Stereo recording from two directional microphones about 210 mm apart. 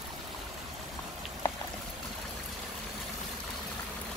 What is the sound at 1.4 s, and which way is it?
Boiling, 10° left (ahead or behind).